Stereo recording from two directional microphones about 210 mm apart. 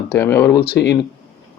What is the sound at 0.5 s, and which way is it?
Speech, 50° left (ahead or behind).